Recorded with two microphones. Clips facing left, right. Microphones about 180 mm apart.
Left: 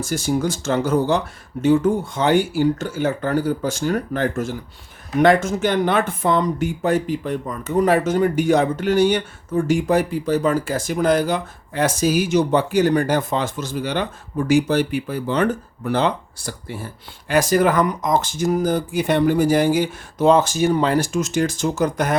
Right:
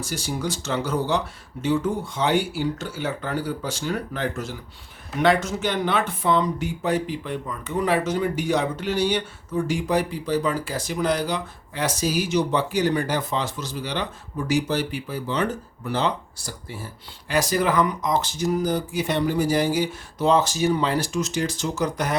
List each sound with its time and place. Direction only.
0.0 s speech: 50° left (ahead or behind)